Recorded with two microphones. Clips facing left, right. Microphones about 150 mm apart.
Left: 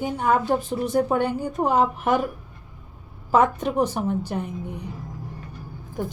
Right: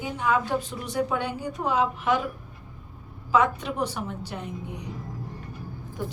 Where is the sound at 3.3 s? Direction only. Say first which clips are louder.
Left 3 dB; 45° left (ahead or behind).